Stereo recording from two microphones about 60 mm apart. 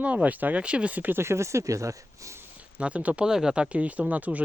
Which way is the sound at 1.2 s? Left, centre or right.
Right.